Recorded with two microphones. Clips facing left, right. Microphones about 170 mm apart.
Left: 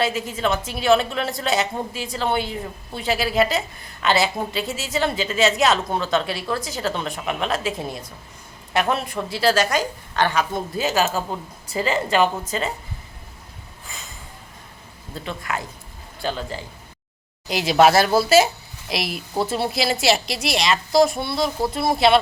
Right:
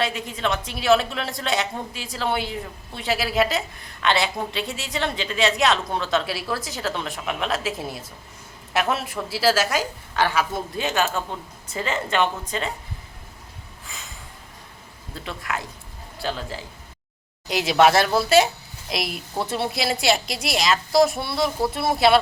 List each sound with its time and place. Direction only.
0.0 s a woman's voice: centre (ahead or behind)
11.3 s speech: 30° left (ahead or behind)
12.1 s a woman's voice: 5° left (ahead or behind)
13.8 s a sound: centre (ahead or behind)
15.2 s a woman's voice: centre (ahead or behind)